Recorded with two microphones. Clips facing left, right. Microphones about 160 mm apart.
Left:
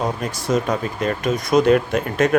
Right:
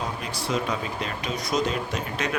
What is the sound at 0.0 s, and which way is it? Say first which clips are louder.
Speech: left 7 dB; 45° left (ahead or behind).